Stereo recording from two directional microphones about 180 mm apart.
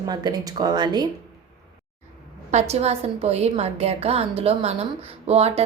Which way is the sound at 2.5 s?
40° right (ahead or behind).